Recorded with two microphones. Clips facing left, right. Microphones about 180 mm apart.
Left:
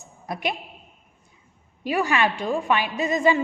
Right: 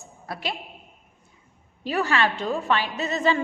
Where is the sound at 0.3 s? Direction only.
20° left (ahead or behind).